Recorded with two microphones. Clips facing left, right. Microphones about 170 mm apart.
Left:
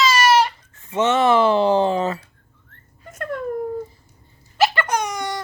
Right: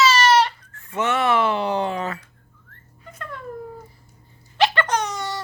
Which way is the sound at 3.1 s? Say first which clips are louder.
Left 9 dB; 45° left (ahead or behind).